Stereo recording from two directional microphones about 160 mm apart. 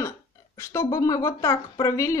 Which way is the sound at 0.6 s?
20° left (ahead or behind).